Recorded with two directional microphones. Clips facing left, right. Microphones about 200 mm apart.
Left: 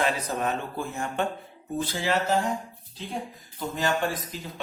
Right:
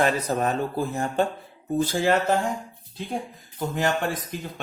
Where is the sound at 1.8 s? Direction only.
50° right (ahead or behind).